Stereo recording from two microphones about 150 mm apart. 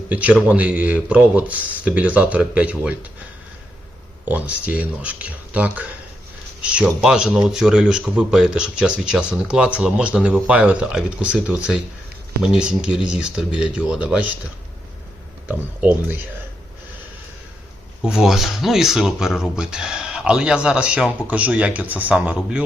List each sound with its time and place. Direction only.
0.1 s speech: 10° right (ahead or behind)
4.3 s speech: 10° right (ahead or behind)
15.4 s speech: 10° right (ahead or behind)
18.0 s speech: 5° right (ahead or behind)